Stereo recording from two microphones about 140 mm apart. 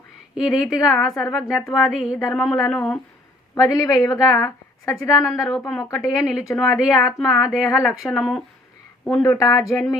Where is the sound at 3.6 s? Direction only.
25° left (ahead or behind).